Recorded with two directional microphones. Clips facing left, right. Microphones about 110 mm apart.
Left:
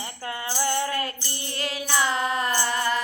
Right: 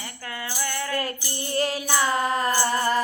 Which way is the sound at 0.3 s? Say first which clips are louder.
Left 4 dB; 25° left (ahead or behind).